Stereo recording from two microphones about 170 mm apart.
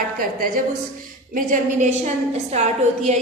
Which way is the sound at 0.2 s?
60° right (ahead or behind).